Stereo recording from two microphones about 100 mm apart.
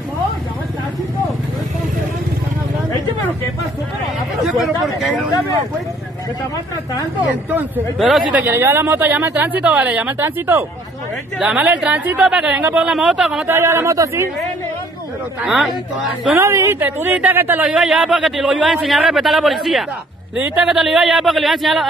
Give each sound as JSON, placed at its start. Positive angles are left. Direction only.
{"t": 4.4, "sound": "a sound", "side_deg": 0}
{"t": 7.2, "sound": "speech", "side_deg": -20}
{"t": 8.0, "sound": "a man's voice", "side_deg": -5}
{"t": 8.5, "sound": "speech", "side_deg": -20}
{"t": 13.5, "sound": "speech", "side_deg": -25}
{"t": 15.4, "sound": "a man's voice", "side_deg": 0}
{"t": 16.3, "sound": "speech", "side_deg": -25}
{"t": 20.3, "sound": "speech", "side_deg": -15}
{"t": 20.7, "sound": "a man's voice", "side_deg": -5}